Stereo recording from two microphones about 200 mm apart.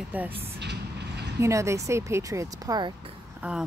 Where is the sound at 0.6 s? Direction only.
55° right (ahead or behind).